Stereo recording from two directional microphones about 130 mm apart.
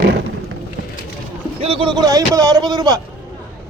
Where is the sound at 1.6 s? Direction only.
45° right (ahead or behind).